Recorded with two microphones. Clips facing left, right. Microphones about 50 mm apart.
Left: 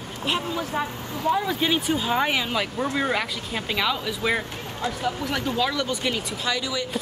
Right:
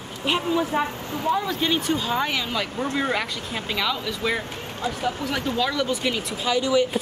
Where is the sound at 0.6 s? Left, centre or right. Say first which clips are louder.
Right 4 dB; right.